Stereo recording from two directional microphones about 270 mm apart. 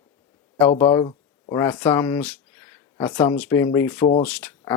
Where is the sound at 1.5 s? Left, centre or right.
Centre.